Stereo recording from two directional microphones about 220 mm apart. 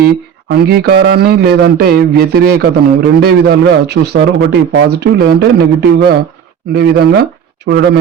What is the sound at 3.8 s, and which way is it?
A man's voice, 50° right (ahead or behind).